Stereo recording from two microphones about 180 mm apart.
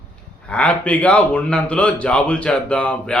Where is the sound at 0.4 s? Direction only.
5° left (ahead or behind).